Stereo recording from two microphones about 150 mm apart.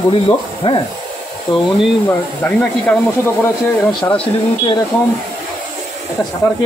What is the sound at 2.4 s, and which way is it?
Speech, 10° left (ahead or behind).